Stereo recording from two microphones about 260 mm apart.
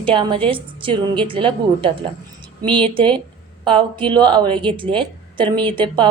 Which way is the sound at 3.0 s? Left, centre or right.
Centre.